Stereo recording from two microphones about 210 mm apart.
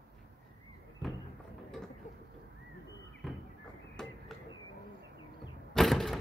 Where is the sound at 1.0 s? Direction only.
Centre (ahead or behind).